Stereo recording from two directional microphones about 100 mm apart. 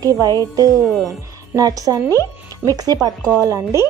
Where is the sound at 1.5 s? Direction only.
40° right (ahead or behind).